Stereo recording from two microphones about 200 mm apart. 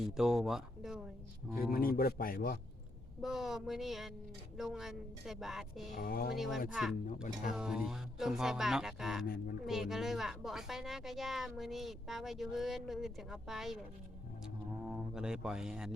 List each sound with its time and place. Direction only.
0.0 s a woman's voice: centre (ahead or behind)
1.7 s speech: 45° left (ahead or behind)
3.2 s a woman's voice: centre (ahead or behind)
6.0 s speech: 50° left (ahead or behind)
6.3 s a woman's voice: centre (ahead or behind)
7.1 s speech: 40° left (ahead or behind)
7.5 s a woman's voice: centre (ahead or behind)
14.8 s a woman's voice: 5° right (ahead or behind)